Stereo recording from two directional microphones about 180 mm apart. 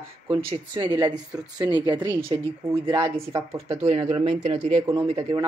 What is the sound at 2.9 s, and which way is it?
Speech, 25° right (ahead or behind).